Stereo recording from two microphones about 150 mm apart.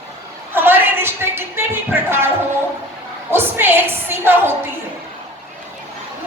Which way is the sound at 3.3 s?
15° right (ahead or behind).